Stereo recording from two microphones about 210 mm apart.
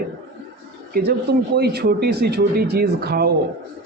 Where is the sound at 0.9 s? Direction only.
50° right (ahead or behind).